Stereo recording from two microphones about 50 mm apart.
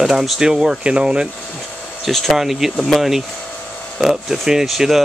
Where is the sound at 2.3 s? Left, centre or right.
Centre.